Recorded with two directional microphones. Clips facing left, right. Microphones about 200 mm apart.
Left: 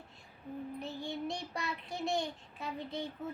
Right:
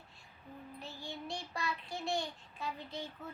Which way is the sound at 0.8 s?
20° left (ahead or behind).